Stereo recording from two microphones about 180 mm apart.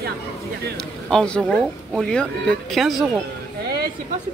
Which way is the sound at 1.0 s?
5° left (ahead or behind).